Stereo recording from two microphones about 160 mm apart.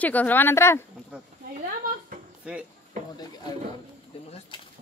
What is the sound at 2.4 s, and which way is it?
Speech, 5° right (ahead or behind).